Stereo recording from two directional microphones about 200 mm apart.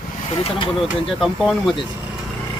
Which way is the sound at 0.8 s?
Centre (ahead or behind).